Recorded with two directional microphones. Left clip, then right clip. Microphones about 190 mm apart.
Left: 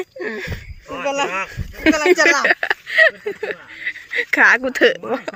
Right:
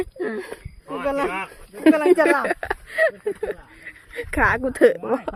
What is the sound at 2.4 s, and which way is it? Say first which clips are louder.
Speech: left 8 dB; 10° right (ahead or behind).